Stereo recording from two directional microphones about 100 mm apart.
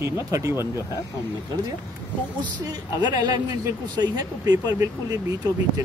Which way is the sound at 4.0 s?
40° right (ahead or behind).